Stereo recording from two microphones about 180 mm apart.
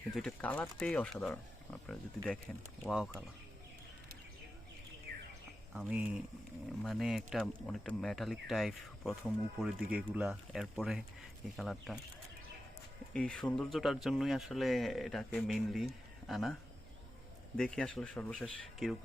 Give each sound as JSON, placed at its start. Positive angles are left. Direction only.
{"t": 0.1, "sound": "speech", "side_deg": 5}
{"t": 5.1, "sound": "bird", "side_deg": -55}
{"t": 5.7, "sound": "speech", "side_deg": -5}
{"t": 13.1, "sound": "speech", "side_deg": 5}
{"t": 17.6, "sound": "speech", "side_deg": 5}